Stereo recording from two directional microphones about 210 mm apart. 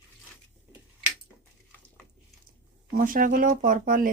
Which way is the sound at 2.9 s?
40° right (ahead or behind).